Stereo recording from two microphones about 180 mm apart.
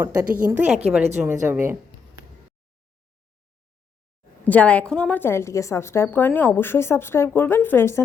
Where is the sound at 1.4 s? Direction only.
10° right (ahead or behind).